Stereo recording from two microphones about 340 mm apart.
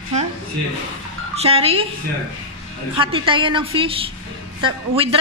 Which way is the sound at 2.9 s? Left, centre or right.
Centre.